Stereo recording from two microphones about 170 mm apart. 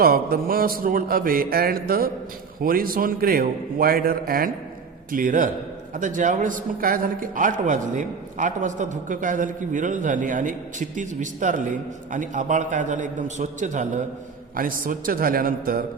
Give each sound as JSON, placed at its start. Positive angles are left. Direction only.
{"t": 0.0, "sound": "a man's voice", "side_deg": -60}